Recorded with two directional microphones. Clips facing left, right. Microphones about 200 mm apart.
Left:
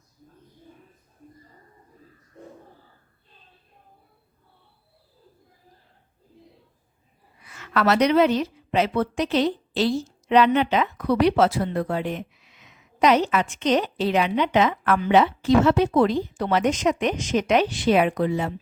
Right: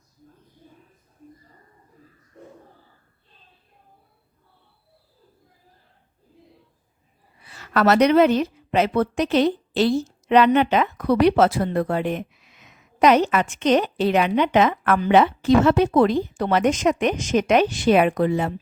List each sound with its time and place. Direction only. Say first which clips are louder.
7.4 s a woman's voice: right 3 dB; 35° right (ahead or behind); by 18.5 s 55° right (ahead or behind)